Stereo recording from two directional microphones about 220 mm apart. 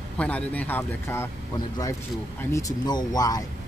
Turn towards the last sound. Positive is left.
turn(degrees=15)  # may be behind; listen again after turning